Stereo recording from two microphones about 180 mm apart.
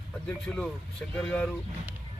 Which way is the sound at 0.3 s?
10° left (ahead or behind).